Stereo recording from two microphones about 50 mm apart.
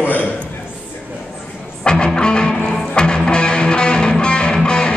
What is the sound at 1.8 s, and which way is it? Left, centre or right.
Music, centre.